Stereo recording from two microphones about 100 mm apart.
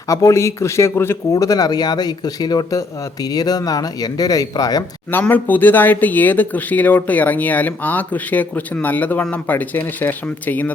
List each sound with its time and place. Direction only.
0.1 s a man's voice: 30° left (ahead or behind)
5.2 s speech: 15° left (ahead or behind)